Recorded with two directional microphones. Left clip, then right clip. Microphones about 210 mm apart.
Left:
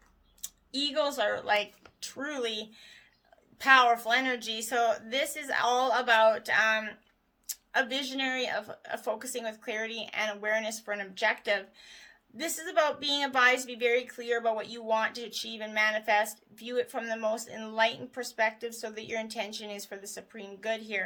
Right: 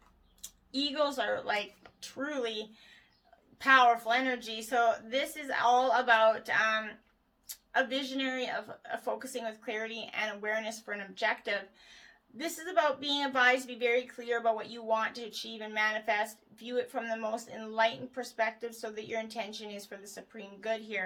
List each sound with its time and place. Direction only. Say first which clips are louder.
0.4 s speech: left 2 dB; 40° left (ahead or behind)